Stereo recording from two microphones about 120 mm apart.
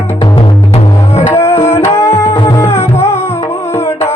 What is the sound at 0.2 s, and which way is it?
Music, 40° left (ahead or behind).